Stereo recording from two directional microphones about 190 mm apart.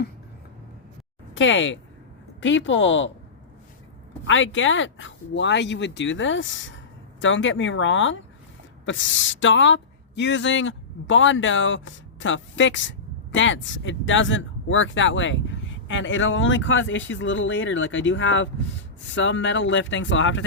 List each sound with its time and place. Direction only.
1.4 s speech: 85° left
4.3 s speech: 90° left